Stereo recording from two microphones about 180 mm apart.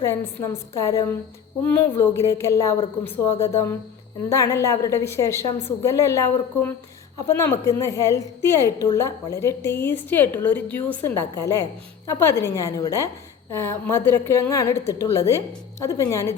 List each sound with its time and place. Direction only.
0.0 s a woman's voice: 15° left (ahead or behind)